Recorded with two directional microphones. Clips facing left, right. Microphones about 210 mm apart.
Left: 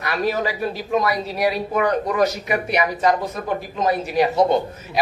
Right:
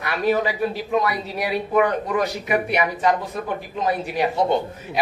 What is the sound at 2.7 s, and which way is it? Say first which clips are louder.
Speech: left 4 dB; 40° left (ahead or behind).